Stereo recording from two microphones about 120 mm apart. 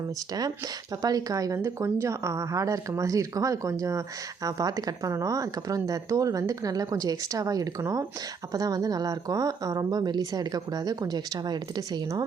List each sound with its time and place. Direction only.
1.0 s speech: 30° right (ahead or behind)